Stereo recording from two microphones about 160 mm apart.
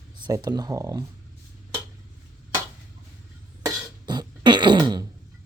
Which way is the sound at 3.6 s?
25° right (ahead or behind).